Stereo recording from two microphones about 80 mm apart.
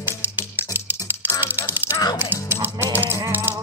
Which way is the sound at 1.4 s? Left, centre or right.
Right.